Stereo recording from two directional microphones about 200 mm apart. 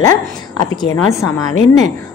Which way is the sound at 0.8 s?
15° left (ahead or behind).